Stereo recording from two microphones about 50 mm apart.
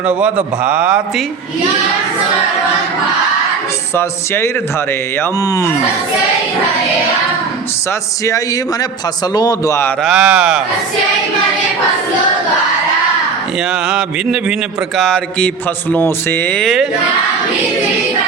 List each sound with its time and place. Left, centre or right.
0.0 s a man's voice: right
3.9 s speech: left
5.4 s speech: left
7.9 s speech: left
10.1 s speech: centre
13.6 s speech: centre
15.4 s a man's voice: left
16.0 s speech: left